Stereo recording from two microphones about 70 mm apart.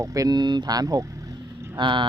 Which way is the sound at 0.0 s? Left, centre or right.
Right.